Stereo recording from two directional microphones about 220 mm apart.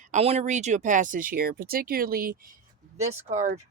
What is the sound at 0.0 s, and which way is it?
Speech, 30° right (ahead or behind).